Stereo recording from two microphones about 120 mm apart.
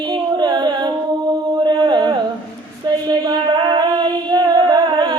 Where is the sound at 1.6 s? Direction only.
35° right (ahead or behind).